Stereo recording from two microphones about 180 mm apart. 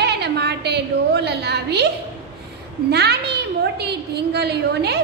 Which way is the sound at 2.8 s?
65° right (ahead or behind).